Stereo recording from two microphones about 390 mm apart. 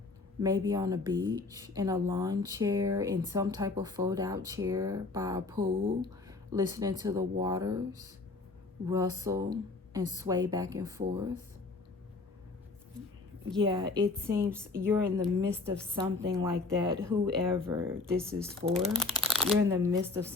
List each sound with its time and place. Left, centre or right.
0.4 s speech: centre
5.5 s speech: right
6.2 s speech: centre
13.6 s a woman's voice: centre